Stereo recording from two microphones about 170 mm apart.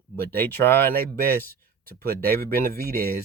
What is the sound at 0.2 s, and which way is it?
Speech, 10° left (ahead or behind).